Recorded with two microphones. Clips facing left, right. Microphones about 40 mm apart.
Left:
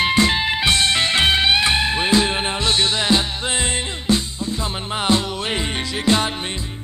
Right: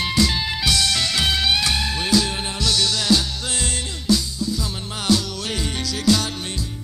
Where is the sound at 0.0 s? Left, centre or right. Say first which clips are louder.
Left 4 dB; left.